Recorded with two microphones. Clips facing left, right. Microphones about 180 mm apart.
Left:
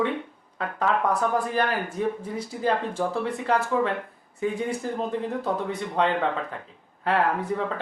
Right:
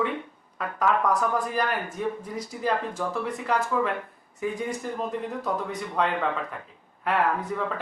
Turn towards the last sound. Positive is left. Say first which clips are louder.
# left 2 dB
turn(degrees=30)  # may be behind; listen again after turning